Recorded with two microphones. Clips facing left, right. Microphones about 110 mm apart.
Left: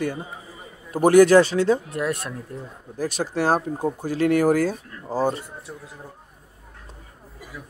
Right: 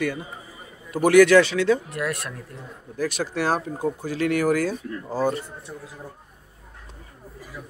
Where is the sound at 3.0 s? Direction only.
40° left (ahead or behind).